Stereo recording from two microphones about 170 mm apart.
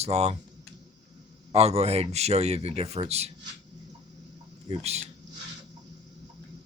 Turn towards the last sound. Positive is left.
turn(degrees=-40)  # may be behind; listen again after turning